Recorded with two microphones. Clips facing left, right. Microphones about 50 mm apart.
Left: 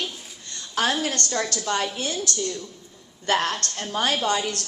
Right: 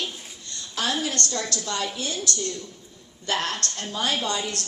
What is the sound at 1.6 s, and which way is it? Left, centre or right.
Speech, left.